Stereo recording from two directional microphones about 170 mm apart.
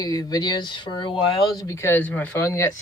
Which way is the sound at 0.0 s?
20° left (ahead or behind).